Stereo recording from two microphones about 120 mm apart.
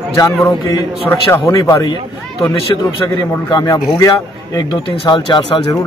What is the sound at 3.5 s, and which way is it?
Speech, 30° left (ahead or behind).